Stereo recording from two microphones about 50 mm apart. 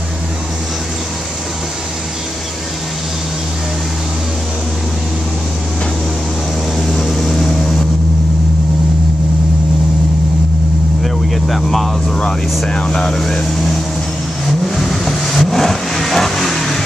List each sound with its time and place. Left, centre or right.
6.8 s vehicle: centre
11.0 s vehicle: centre
12.6 s speech: centre
13.1 s speech: centre
14.6 s vehicle: centre